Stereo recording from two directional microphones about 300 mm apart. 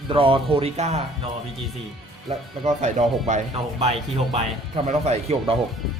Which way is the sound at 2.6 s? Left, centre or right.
Right.